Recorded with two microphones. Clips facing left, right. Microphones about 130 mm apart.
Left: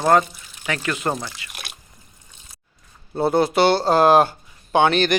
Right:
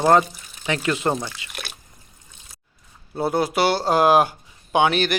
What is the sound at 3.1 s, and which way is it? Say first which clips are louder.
Speech: left 3 dB; 10° right (ahead or behind).